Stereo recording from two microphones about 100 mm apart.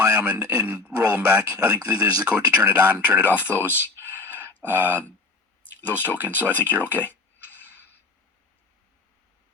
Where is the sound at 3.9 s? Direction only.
20° right (ahead or behind).